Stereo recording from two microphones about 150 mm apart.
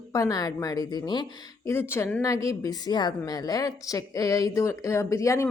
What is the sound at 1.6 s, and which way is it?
Speech, 15° left (ahead or behind).